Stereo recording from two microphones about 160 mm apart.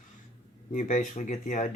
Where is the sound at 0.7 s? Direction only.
55° left (ahead or behind).